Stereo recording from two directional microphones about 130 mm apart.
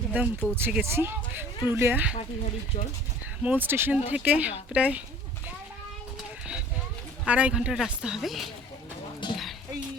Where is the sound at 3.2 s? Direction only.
15° right (ahead or behind).